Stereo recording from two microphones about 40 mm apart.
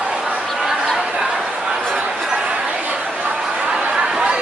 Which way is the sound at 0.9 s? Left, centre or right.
Centre.